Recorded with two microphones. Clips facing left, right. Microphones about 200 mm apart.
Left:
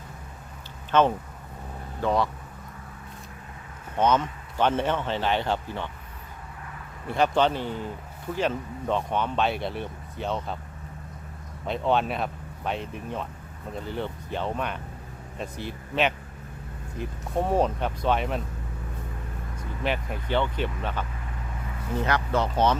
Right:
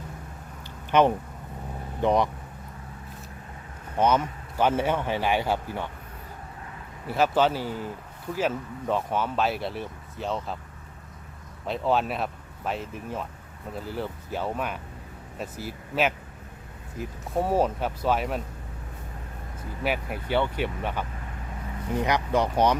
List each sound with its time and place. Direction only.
0.9 s speech: 15° right (ahead or behind)
3.9 s speech: 10° right (ahead or behind)
7.1 s speech: 5° right (ahead or behind)
11.6 s speech: centre (ahead or behind)
19.8 s speech: 10° right (ahead or behind)